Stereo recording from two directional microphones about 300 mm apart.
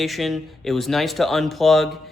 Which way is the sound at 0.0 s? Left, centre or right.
Centre.